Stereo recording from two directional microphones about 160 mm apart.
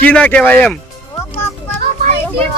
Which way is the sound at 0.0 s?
10° left (ahead or behind).